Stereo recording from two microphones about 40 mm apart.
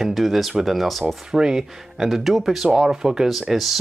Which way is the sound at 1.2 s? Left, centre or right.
Centre.